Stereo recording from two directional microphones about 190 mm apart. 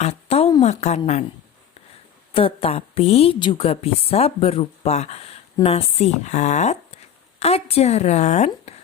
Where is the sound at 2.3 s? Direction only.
30° left (ahead or behind).